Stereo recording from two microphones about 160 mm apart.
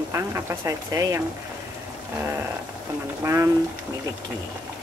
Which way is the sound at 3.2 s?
15° right (ahead or behind).